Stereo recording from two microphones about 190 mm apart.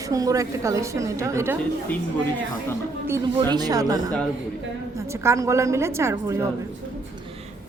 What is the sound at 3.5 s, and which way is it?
Speech, 20° right (ahead or behind).